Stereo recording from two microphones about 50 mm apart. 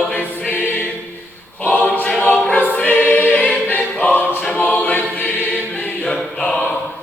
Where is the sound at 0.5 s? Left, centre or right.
Left.